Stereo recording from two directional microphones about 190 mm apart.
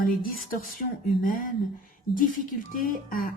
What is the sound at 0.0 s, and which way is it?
Speech, 50° left (ahead or behind).